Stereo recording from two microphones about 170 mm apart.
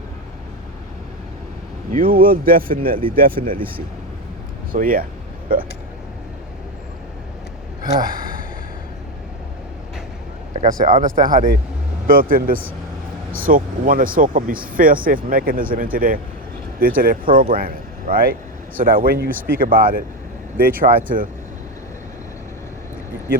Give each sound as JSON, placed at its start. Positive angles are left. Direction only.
{"t": 1.9, "sound": "speech", "side_deg": -55}
{"t": 4.7, "sound": "speech", "side_deg": -55}
{"t": 8.0, "sound": "gasp", "side_deg": -55}
{"t": 10.7, "sound": "speech", "side_deg": -50}